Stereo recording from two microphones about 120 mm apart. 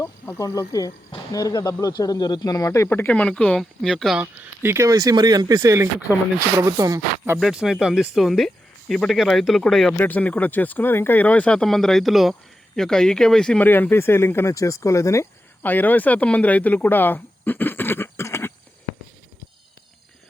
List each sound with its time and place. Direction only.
0.0 s speech: 25° left (ahead or behind); by 4.2 s centre (ahead or behind)
4.2 s speech: 20° right (ahead or behind)
7.3 s speech: centre (ahead or behind)
10.0 s speech: 15° left (ahead or behind)